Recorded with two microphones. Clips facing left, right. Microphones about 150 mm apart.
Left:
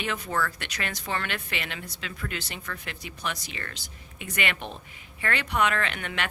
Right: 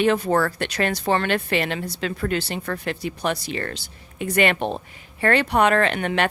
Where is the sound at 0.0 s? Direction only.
35° right (ahead or behind).